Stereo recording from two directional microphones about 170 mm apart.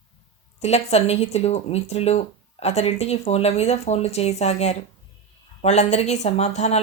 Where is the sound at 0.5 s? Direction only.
40° left (ahead or behind).